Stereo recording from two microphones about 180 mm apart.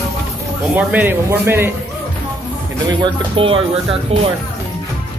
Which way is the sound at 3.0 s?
30° right (ahead or behind).